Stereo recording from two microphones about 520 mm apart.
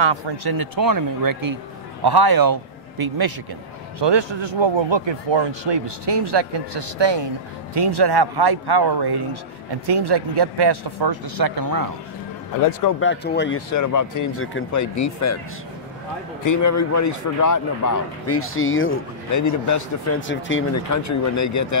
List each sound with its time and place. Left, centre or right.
0.0 s a man's voice: right
4.0 s speech: right
13.0 s speech: centre
13.7 s a man's voice: left
16.4 s a man's voice: left
20.2 s a man's voice: left